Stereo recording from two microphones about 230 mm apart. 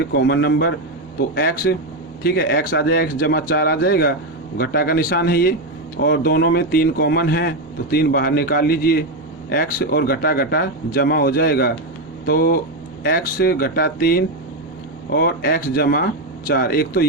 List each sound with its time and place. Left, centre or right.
0.0 s speech: left